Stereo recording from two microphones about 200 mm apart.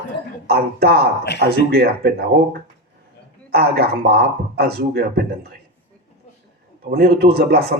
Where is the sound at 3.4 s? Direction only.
50° right (ahead or behind).